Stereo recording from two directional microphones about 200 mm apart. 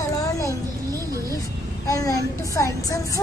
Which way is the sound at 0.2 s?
15° left (ahead or behind).